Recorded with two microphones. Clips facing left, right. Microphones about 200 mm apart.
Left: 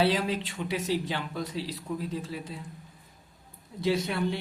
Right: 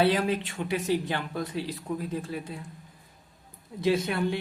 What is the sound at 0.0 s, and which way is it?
Speech, 55° right (ahead or behind).